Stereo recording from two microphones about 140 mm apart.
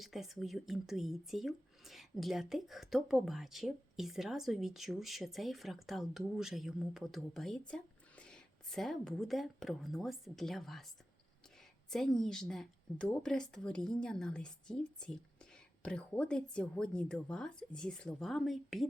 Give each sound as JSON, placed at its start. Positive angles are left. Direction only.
{"t": 0.0, "sound": "speech", "side_deg": 0}
{"t": 11.9, "sound": "speech", "side_deg": 5}